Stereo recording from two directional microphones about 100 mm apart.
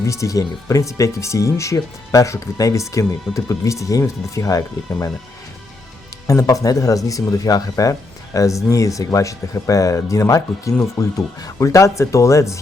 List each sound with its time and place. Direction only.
0.0 s speech: 30° left (ahead or behind)
6.2 s speech: 35° left (ahead or behind)